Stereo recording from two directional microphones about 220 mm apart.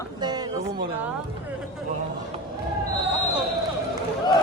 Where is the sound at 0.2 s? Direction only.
20° right (ahead or behind).